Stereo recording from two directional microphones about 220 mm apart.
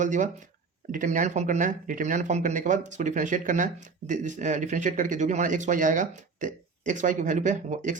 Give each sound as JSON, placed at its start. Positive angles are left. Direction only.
{"t": 0.0, "sound": "speech", "side_deg": -35}